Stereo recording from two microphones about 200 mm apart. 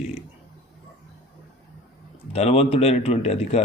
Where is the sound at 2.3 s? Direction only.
30° left (ahead or behind).